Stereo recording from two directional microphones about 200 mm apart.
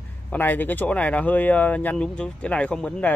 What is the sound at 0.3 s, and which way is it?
Speech, 10° left (ahead or behind).